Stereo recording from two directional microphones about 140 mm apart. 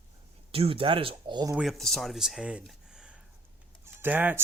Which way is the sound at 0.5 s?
40° right (ahead or behind).